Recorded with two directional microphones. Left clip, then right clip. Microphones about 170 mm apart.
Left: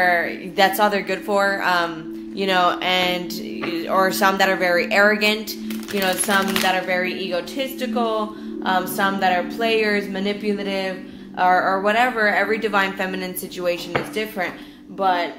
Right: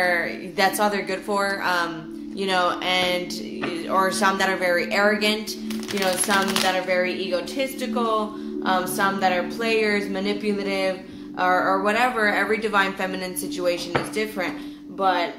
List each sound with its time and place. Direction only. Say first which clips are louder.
0.0 s a woman's voice: left 4 dB; 35° left (ahead or behind)